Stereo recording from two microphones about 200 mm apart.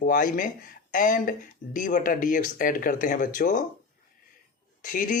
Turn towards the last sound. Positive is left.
turn(degrees=40)  # may be behind; listen again after turning